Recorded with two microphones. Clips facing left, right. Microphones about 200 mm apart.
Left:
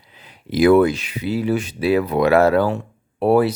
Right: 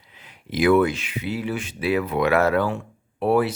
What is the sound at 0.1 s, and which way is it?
Speech, 35° left (ahead or behind).